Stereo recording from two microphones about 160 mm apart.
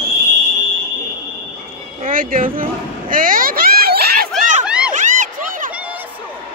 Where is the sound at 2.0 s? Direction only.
60° right (ahead or behind); by 4.3 s 80° right.